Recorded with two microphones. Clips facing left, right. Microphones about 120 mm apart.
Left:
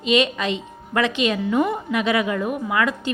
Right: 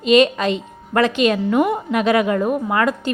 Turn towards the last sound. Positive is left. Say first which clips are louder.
# right 3 dB
turn(degrees=-45)  # may be behind; listen again after turning